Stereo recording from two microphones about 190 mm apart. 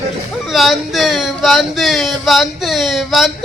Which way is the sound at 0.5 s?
Centre (ahead or behind).